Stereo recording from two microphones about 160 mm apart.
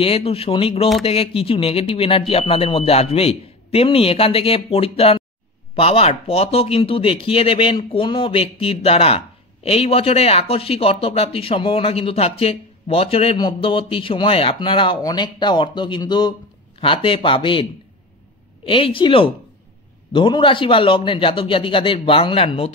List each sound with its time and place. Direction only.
0.0 s speech: 35° left (ahead or behind)
18.7 s speech: 35° left (ahead or behind)